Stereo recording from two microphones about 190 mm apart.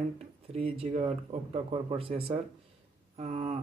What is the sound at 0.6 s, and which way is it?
Speech, 30° right (ahead or behind).